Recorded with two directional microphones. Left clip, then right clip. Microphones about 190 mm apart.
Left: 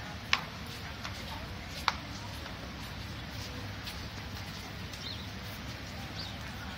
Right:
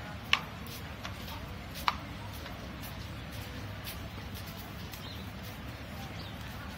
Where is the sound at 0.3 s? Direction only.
30° left (ahead or behind).